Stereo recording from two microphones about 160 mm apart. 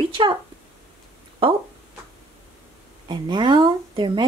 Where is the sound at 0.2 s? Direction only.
30° right (ahead or behind).